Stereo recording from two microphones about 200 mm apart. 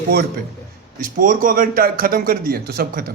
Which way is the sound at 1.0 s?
45° right (ahead or behind).